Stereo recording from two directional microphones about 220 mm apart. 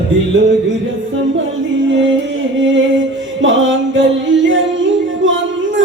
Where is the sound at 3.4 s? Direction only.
60° right (ahead or behind).